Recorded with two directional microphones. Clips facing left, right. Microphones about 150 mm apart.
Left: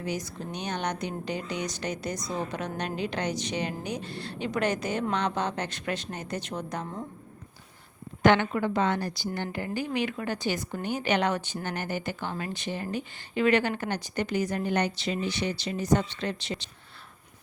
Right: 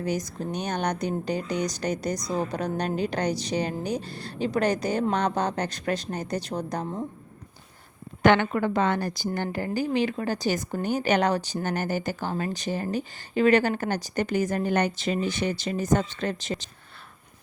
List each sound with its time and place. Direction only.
0.0 s a woman's voice: 40° right (ahead or behind)
8.2 s a woman's voice: 55° right (ahead or behind)